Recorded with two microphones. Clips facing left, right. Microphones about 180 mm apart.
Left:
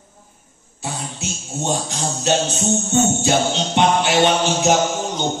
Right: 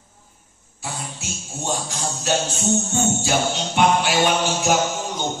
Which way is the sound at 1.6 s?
20° left (ahead or behind).